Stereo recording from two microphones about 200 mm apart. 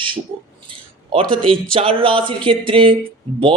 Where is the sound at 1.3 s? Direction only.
25° right (ahead or behind).